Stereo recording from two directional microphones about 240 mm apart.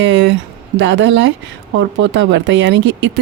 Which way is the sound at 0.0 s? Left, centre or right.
Right.